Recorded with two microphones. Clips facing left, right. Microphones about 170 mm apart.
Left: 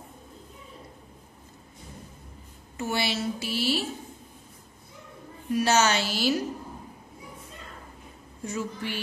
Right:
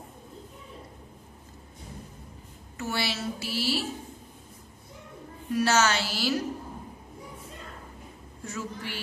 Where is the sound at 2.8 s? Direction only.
20° left (ahead or behind).